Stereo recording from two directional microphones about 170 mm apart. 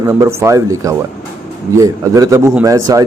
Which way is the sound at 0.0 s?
20° right (ahead or behind).